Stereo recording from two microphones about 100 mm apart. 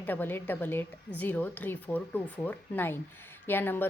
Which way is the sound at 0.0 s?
20° left (ahead or behind).